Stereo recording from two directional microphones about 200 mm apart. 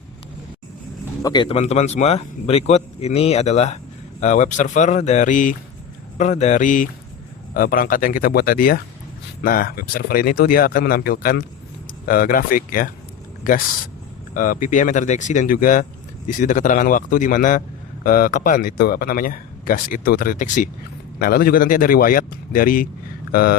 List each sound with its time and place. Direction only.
1.2 s speech: 20° left (ahead or behind); by 23.6 s 50° left (ahead or behind)